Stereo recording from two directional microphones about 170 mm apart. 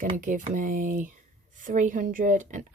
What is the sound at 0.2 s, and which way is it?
A woman's voice, 50° right (ahead or behind).